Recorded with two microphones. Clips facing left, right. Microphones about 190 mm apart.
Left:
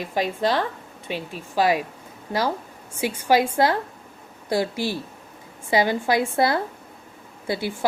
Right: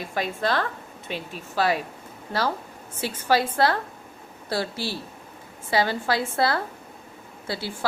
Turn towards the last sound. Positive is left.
turn(degrees=15)  # may be behind; listen again after turning